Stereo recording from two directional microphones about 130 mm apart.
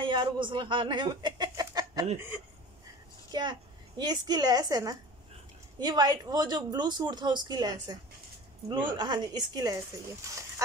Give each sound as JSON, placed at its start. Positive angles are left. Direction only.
{"t": 0.0, "sound": "speech", "side_deg": -40}
{"t": 3.3, "sound": "a woman's voice", "side_deg": -35}